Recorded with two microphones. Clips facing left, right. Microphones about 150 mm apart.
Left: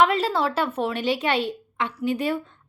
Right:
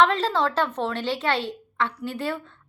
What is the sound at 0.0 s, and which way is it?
A woman's voice, 10° left (ahead or behind).